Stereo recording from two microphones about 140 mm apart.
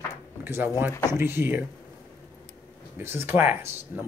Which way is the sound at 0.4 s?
15° right (ahead or behind).